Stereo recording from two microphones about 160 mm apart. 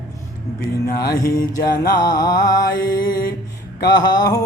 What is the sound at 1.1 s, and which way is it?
Music, 20° left (ahead or behind).